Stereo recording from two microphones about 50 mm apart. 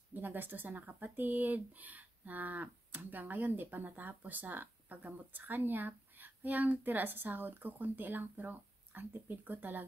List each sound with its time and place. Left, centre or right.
0.1 s speech: right